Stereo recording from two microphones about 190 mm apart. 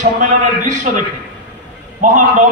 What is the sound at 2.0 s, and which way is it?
Speech, 40° right (ahead or behind).